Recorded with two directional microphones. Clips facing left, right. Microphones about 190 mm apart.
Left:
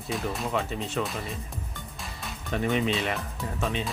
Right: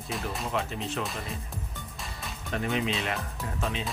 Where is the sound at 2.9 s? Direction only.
Centre (ahead or behind).